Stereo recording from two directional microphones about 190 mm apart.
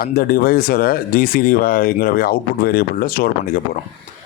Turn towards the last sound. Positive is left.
turn(degrees=50)  # may be behind; listen again after turning